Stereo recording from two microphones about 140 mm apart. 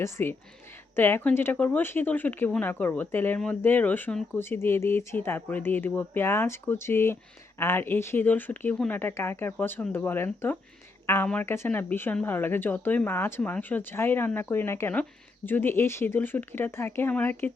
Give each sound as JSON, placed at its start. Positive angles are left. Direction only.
{"t": 0.0, "sound": "speech", "side_deg": 15}